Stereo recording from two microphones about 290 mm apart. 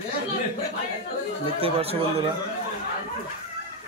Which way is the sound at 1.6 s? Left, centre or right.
Centre.